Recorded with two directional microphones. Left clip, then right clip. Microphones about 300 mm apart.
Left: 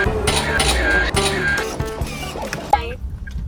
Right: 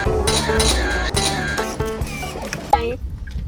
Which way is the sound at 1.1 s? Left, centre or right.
Centre.